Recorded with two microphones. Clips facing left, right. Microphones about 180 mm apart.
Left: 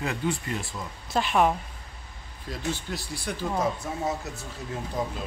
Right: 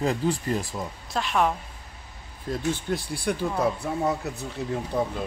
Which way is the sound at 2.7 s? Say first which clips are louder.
Right 5 dB; 55° right (ahead or behind).